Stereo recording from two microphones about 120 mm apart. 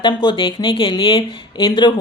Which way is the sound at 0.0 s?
40° left (ahead or behind).